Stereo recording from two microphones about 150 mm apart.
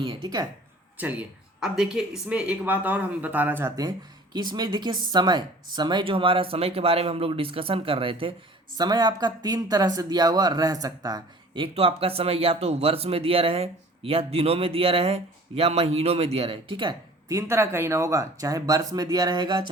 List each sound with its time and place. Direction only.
0.0 s speech: 30° right (ahead or behind)
0.9 s speech: 10° right (ahead or behind)
3.8 s speech: 25° right (ahead or behind)
17.3 s speech: 15° right (ahead or behind)